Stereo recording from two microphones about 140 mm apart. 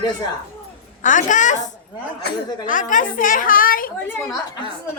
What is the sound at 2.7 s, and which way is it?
A woman's voice, 70° left (ahead or behind).